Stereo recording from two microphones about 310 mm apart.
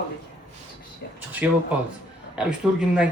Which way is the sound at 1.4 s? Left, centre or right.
Centre.